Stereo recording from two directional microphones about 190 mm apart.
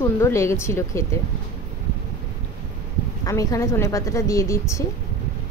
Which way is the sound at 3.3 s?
15° left (ahead or behind).